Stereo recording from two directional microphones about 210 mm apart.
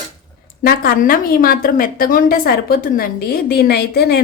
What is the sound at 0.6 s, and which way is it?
A woman's voice, 45° left (ahead or behind).